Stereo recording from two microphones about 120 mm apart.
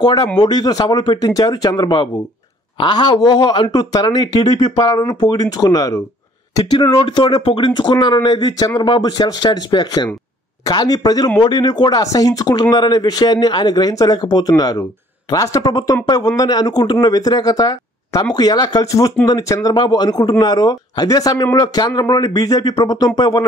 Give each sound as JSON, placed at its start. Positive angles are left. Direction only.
{"t": 0.0, "sound": "speech", "side_deg": 40}